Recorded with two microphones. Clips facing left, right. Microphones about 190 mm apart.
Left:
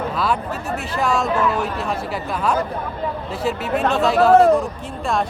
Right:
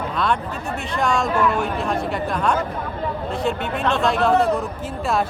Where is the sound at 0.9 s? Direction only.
Centre (ahead or behind).